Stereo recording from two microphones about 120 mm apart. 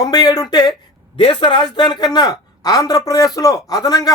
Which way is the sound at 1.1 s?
45° left (ahead or behind).